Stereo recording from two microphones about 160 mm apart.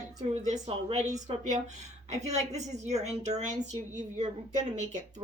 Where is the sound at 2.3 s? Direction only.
45° right (ahead or behind).